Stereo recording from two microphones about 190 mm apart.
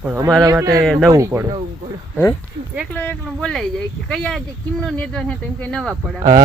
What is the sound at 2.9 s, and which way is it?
Speech, 10° left (ahead or behind).